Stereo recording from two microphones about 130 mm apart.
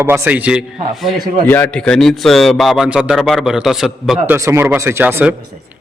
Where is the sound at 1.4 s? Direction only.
15° left (ahead or behind).